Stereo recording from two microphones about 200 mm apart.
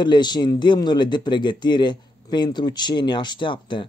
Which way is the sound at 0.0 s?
20° left (ahead or behind).